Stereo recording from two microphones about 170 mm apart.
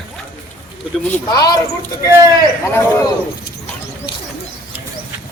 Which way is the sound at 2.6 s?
15° left (ahead or behind).